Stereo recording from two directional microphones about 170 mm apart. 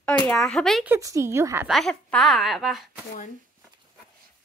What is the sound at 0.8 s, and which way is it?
Speech, 15° right (ahead or behind).